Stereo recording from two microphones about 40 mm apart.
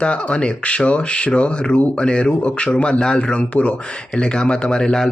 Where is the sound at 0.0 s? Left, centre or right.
Left.